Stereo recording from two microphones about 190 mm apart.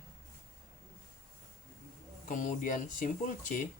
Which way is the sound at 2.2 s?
40° left (ahead or behind).